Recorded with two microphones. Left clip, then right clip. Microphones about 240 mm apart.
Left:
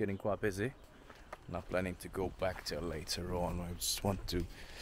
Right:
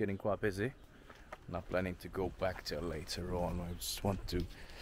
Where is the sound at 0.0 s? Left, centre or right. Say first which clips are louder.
Even; centre.